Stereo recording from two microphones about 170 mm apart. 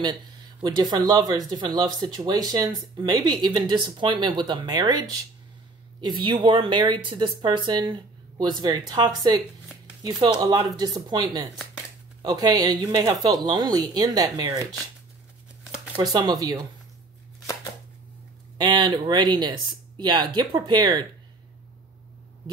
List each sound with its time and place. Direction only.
0.0 s speech: 25° right (ahead or behind)
16.0 s speech: 25° right (ahead or behind)
18.6 s speech: 25° right (ahead or behind)